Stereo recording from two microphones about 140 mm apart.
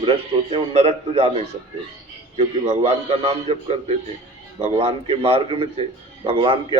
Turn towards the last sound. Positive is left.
turn(degrees=-40)  # may be behind; listen again after turning